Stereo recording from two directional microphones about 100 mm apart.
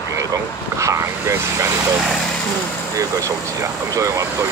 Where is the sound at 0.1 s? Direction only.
30° right (ahead or behind).